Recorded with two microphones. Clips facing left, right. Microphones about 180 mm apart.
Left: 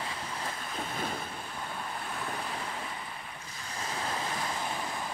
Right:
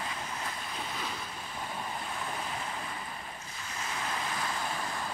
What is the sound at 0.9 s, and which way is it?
Waves, 50° left (ahead or behind).